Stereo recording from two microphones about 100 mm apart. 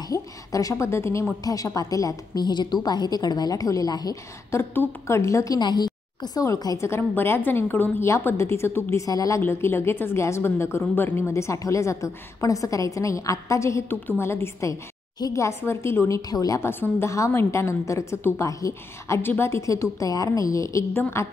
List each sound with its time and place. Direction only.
0.1 s a woman's voice: 35° left (ahead or behind)
4.5 s a woman's voice: 25° left (ahead or behind)
5.6 s a woman's voice: 45° left (ahead or behind)
6.9 s a woman's voice: 25° left (ahead or behind)
9.0 s a woman's voice: 35° left (ahead or behind)
9.4 s a woman's voice: 25° left (ahead or behind)
16.3 s a woman's voice: 40° left (ahead or behind)
16.6 s a woman's voice: 25° left (ahead or behind)